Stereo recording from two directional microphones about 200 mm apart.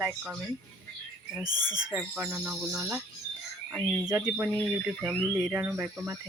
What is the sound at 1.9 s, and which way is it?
Speech, 5° right (ahead or behind).